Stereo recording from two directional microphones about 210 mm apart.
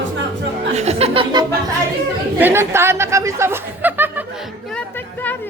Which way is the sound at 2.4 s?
10° right (ahead or behind).